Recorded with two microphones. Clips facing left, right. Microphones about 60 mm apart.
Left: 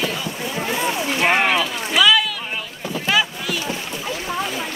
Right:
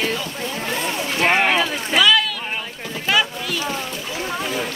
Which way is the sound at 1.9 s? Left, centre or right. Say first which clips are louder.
Even; centre.